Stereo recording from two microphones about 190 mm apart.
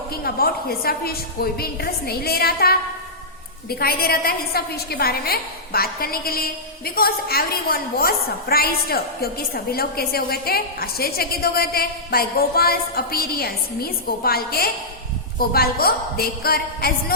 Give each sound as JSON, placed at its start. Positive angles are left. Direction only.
{"t": 0.1, "sound": "a woman's voice", "side_deg": 55}